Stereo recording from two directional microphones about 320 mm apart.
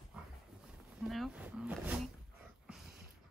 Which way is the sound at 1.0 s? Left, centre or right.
Centre.